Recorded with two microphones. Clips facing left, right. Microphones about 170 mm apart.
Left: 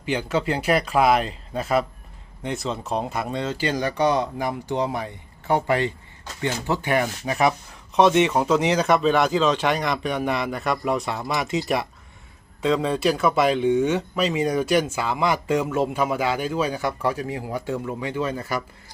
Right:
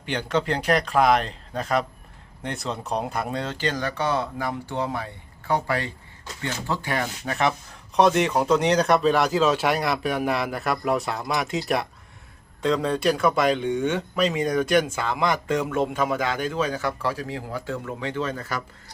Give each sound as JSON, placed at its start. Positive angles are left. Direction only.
{"t": 0.0, "sound": "speech", "side_deg": 5}
{"t": 7.9, "sound": "speech", "side_deg": 0}